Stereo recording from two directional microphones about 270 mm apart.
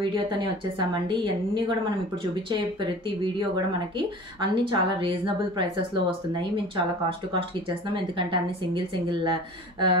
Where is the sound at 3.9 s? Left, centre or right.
Centre.